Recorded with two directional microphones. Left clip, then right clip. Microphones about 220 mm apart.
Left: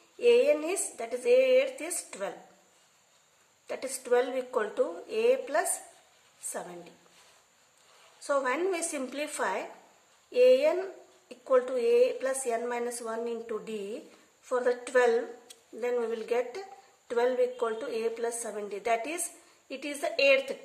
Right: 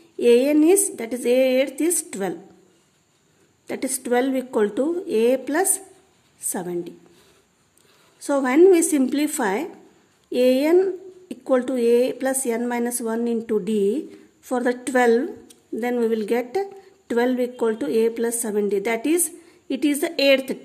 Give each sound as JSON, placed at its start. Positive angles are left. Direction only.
{"t": 0.2, "sound": "speech", "side_deg": -45}
{"t": 3.6, "sound": "speech", "side_deg": -45}
{"t": 8.3, "sound": "speech", "side_deg": -45}